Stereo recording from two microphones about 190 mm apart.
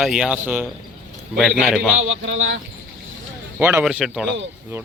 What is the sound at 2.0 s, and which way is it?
Speech, 90° right.